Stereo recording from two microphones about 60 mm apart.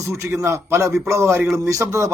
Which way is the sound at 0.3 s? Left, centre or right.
Right.